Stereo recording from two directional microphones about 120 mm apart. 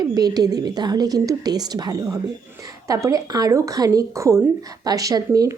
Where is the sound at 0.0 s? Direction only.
35° right (ahead or behind).